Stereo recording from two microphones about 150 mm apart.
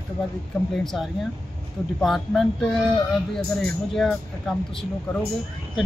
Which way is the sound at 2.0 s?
Centre (ahead or behind).